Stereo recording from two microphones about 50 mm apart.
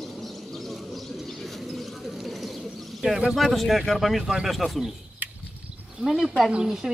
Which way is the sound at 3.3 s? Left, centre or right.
Centre.